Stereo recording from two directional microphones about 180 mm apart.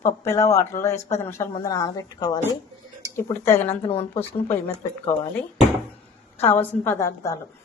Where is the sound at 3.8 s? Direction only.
30° left (ahead or behind).